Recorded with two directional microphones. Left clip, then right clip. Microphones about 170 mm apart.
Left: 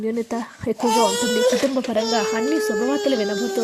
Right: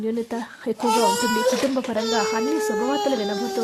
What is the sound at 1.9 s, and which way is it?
Speech, 10° left (ahead or behind).